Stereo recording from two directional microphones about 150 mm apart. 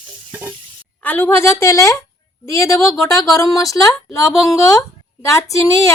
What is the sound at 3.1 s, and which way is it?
Speech, 20° left (ahead or behind).